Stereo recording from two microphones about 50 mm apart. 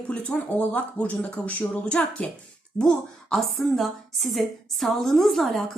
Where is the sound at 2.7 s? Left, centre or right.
Centre.